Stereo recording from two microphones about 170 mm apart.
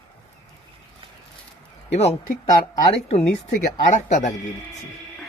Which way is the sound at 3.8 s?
45° left (ahead or behind).